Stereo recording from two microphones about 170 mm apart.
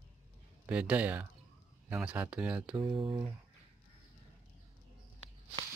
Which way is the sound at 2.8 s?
30° right (ahead or behind).